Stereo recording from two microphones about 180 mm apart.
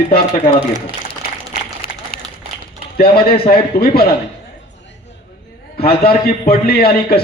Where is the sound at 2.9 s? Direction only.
60° left (ahead or behind).